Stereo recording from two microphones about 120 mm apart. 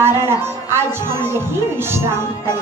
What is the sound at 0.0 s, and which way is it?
Speech, 20° right (ahead or behind).